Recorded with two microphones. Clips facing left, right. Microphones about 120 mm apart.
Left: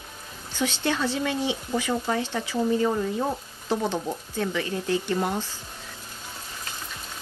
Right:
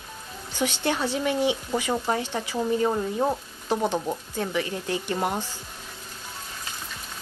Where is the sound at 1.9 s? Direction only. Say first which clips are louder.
Right 1 dB; 40° right (ahead or behind).